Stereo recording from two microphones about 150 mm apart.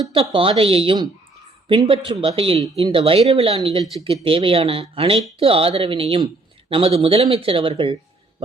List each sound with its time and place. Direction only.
0.1 s speech: 35° right (ahead or behind)